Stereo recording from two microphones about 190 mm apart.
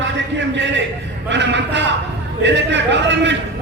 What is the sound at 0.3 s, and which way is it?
A man's voice, 70° right (ahead or behind).